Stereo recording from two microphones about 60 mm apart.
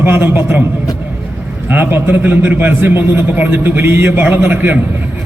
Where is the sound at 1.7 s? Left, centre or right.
Right.